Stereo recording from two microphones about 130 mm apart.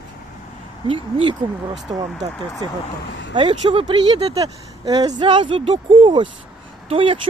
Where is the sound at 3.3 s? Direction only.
40° right (ahead or behind).